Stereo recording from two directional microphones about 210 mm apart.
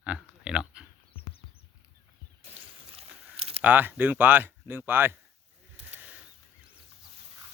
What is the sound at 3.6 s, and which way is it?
Speech, 10° right (ahead or behind).